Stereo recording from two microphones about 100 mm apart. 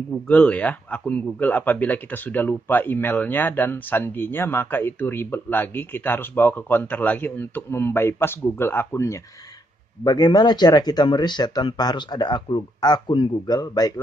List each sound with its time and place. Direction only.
0.1 s a man's voice: 15° left (ahead or behind)
10.0 s speech: 45° left (ahead or behind)
13.6 s a man's voice: 40° left (ahead or behind)